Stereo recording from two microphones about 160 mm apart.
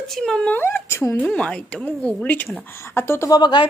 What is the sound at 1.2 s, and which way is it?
A woman's voice, 5° left (ahead or behind).